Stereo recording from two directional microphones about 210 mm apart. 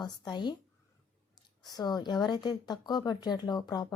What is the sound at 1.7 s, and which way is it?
A woman's voice, 20° left (ahead or behind).